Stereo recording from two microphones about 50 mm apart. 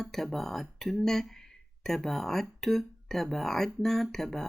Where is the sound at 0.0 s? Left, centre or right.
Centre.